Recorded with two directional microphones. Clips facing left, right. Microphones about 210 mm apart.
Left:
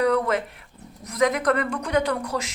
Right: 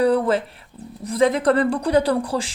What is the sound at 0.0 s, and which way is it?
Speech, 30° right (ahead or behind).